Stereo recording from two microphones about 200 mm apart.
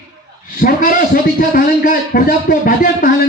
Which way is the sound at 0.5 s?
45° left (ahead or behind).